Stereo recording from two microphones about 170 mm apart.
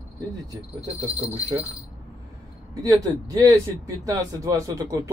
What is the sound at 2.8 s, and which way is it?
A man's voice, 20° right (ahead or behind).